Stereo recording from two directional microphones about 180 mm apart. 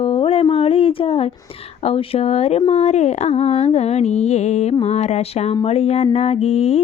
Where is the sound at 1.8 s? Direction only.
35° left (ahead or behind).